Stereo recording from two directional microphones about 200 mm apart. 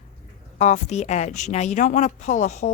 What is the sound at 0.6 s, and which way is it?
A woman's voice, 35° left (ahead or behind).